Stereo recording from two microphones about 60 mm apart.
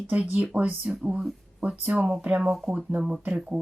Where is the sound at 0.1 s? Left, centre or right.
Right.